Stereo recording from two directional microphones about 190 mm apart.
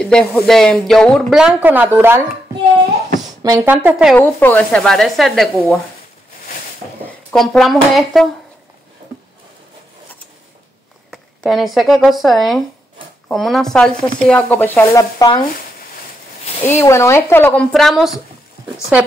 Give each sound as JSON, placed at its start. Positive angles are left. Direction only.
{"t": 0.0, "sound": "speech", "side_deg": 5}
{"t": 3.6, "sound": "speech", "side_deg": -10}
{"t": 4.2, "sound": "speech", "side_deg": 10}
{"t": 7.1, "sound": "speech", "side_deg": 0}
{"t": 11.1, "sound": "speech", "side_deg": 0}
{"t": 16.6, "sound": "speech", "side_deg": 15}
{"t": 17.7, "sound": "speech", "side_deg": 0}